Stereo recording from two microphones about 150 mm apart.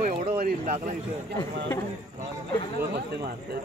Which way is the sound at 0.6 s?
50° right (ahead or behind).